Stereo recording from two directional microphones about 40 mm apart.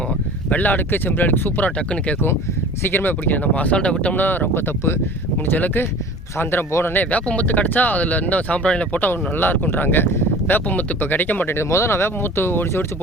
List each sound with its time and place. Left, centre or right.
0.5 s speech: left
0.9 s speech: left
2.8 s speech: left
4.1 s speech: left
5.5 s speech: left
6.4 s speech: left
7.4 s speech: left
8.6 s speech: left
9.0 s speech: left
11.4 s speech: left